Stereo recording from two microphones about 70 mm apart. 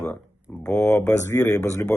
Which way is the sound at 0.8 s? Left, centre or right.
Left.